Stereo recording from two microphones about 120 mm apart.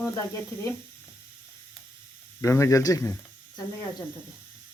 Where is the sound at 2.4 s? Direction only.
25° left (ahead or behind).